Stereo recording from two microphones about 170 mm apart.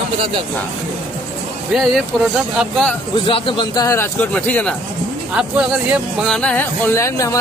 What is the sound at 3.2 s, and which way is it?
Speech, 30° left (ahead or behind).